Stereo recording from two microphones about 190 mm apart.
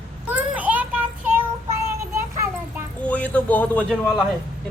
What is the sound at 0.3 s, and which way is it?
Child singing, 10° right (ahead or behind).